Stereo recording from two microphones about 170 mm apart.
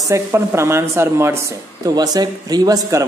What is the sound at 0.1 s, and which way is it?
Speech, 15° right (ahead or behind).